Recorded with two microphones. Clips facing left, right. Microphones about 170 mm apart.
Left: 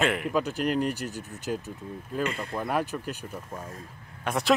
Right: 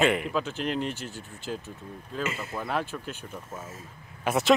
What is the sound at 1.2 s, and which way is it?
Speech, 40° left (ahead or behind).